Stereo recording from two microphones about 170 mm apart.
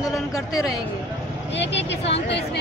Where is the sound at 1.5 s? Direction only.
90° left.